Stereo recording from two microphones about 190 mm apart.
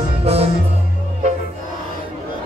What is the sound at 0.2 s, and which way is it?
Music, 30° right (ahead or behind).